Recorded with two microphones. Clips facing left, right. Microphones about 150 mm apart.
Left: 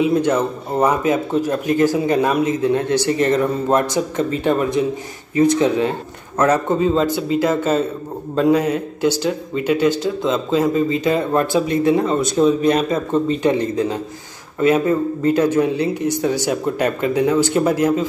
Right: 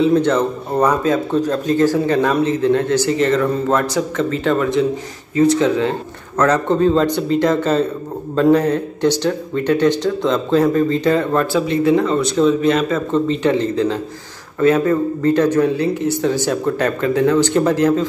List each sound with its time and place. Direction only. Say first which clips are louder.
0.0 s a man's voice: right 2 dB; 10° left (ahead or behind)
6.5 s a man's voice: right 3 dB; 5° left (ahead or behind)